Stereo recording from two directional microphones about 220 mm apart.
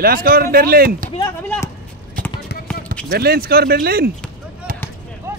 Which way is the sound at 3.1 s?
45° right (ahead or behind).